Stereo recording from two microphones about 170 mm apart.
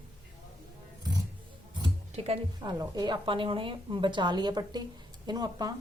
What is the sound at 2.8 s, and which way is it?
A woman's voice, 25° right (ahead or behind).